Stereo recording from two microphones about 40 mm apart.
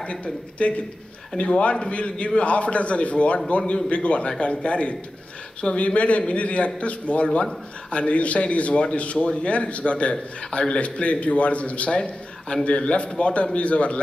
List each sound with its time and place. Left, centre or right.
0.0 s a man's voice: left